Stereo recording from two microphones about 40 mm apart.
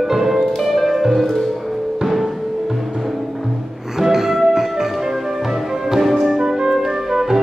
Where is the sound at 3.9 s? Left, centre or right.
Centre.